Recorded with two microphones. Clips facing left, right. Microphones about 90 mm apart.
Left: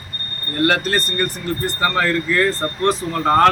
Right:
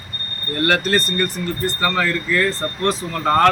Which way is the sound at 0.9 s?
20° left (ahead or behind).